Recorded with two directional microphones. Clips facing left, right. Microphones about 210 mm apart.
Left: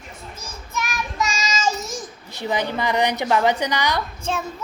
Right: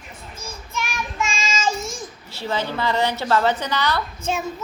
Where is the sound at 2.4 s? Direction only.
15° left (ahead or behind).